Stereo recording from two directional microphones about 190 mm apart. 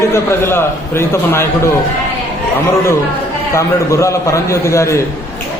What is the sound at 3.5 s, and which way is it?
A man's voice, 15° left (ahead or behind).